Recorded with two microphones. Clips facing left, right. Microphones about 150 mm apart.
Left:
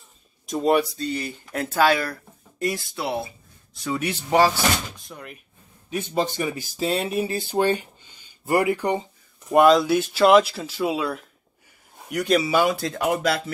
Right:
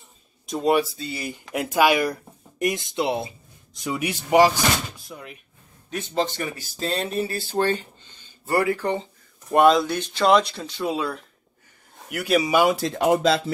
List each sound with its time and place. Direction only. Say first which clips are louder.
0.5 s speech: left 1 dB; centre (ahead or behind)
5.0 s speech: even; centre (ahead or behind)
5.9 s speech: left 1 dB; 10° left (ahead or behind)
9.5 s speech: left 1 dB; centre (ahead or behind); by 13.4 s 25° right (ahead or behind)